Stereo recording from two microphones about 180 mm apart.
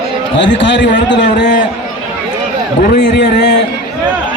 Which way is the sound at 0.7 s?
80° left.